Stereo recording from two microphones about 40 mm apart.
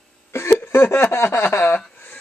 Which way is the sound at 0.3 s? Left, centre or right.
Left.